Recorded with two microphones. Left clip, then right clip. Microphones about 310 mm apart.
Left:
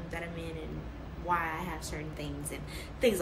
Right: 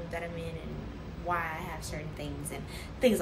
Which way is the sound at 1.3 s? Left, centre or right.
Centre.